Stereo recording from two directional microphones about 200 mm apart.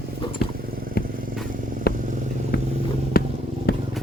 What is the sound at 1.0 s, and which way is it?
Vehicle, 50° left (ahead or behind).